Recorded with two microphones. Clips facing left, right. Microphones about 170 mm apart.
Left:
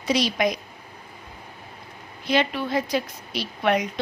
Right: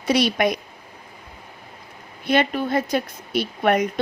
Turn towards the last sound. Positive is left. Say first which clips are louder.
# right 3 dB
turn(degrees=-50)  # may be behind; listen again after turning